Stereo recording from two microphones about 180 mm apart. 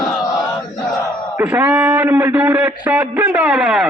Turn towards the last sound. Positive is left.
turn(degrees=-5)  # may be behind; listen again after turning